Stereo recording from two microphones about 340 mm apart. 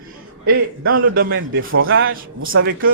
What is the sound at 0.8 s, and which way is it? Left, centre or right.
A man's voice, right.